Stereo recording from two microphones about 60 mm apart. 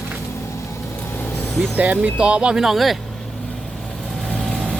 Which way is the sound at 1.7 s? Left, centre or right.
Right.